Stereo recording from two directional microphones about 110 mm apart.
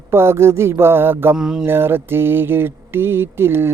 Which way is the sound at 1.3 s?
5° right (ahead or behind).